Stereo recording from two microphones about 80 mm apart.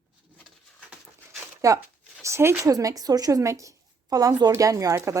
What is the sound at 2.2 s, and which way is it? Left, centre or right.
Speech, right.